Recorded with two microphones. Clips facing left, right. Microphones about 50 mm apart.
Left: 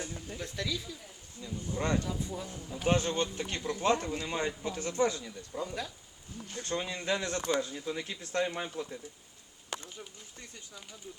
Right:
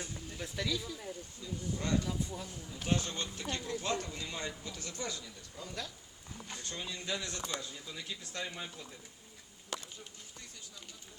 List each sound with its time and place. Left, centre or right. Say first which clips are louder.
0.0 s a sound: left 4 dB; centre
0.3 s speech: even; centre
1.7 s speech: left 3 dB; left
2.0 s speech: left 2 dB; centre
2.8 s speech: left 7 dB; left
5.6 s speech: left 2 dB; centre
6.6 s speech: left 9 dB; left